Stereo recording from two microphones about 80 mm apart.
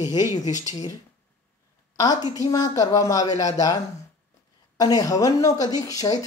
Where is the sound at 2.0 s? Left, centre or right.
Left.